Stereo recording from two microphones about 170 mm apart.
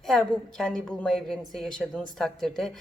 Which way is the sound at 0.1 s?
5° left (ahead or behind).